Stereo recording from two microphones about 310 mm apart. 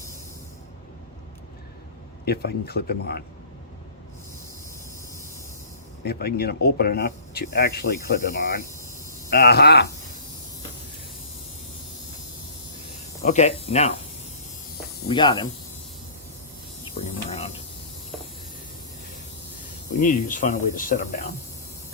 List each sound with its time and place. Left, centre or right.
2.2 s speech: left
6.1 s speech: left
13.2 s speech: left
15.0 s speech: centre
16.8 s snake: centre
20.0 s speech: left